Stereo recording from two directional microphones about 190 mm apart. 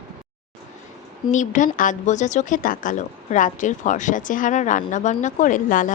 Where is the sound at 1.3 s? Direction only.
40° left (ahead or behind).